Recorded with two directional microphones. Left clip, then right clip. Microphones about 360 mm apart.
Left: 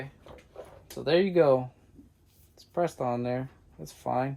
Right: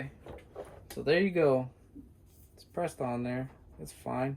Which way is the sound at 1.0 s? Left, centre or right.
Centre.